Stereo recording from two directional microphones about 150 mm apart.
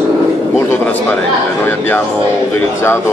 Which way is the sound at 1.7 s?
15° left (ahead or behind).